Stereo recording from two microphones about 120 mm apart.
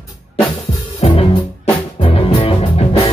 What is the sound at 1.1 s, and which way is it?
Music, 40° left (ahead or behind).